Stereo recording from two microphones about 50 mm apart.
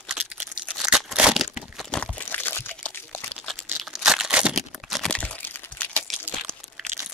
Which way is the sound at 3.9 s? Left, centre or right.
Centre.